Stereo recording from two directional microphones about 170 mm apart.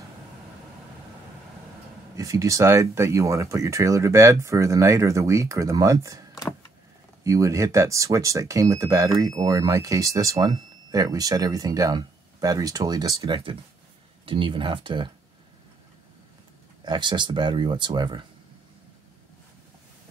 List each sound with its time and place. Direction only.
2.1 s speech: 20° right (ahead or behind)
7.2 s speech: 20° right (ahead or behind)
16.8 s speech: 25° right (ahead or behind)